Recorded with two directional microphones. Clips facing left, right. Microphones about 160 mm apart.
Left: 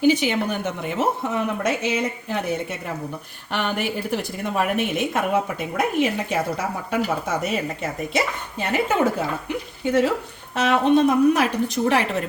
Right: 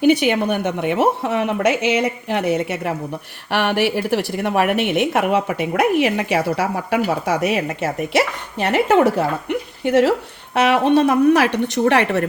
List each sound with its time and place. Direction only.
0.0 s a woman's voice: 65° right (ahead or behind)